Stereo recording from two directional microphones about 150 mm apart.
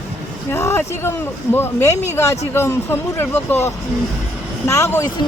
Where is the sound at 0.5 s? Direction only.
20° left (ahead or behind).